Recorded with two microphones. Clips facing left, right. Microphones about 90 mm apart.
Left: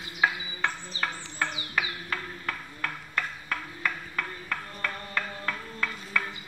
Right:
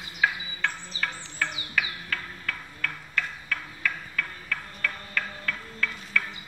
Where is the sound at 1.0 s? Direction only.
25° left (ahead or behind).